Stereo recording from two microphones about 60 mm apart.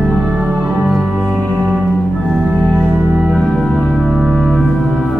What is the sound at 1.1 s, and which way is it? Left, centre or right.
Music, centre.